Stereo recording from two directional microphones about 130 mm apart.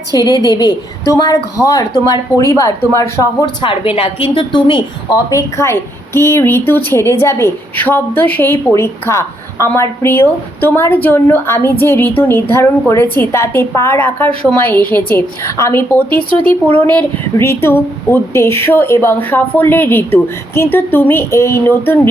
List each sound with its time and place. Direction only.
0.1 s a woman's voice: 30° left (ahead or behind)
3.4 s a woman's voice: 40° left (ahead or behind); by 21.9 s 20° left (ahead or behind)